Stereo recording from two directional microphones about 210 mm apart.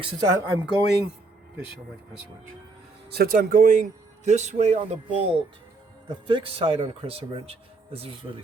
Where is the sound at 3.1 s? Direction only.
45° right (ahead or behind).